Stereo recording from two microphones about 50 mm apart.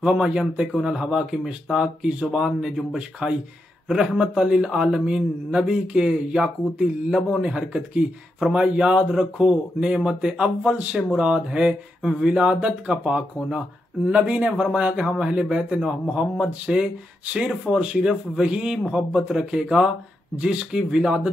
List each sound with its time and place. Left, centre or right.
0.0 s speech: right
4.2 s speech: right
10.6 s speech: right